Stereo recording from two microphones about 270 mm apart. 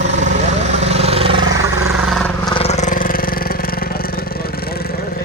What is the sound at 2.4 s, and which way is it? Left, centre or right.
Vehicle, centre.